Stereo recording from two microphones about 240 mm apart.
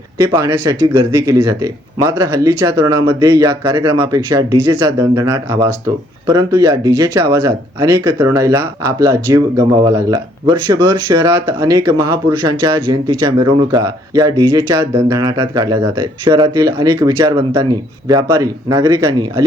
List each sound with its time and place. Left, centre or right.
0.2 s speech: centre